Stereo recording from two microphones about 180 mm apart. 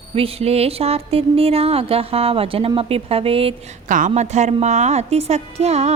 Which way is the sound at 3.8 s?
45° right (ahead or behind).